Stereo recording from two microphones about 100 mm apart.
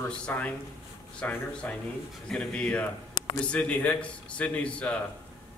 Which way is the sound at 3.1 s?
50° left (ahead or behind).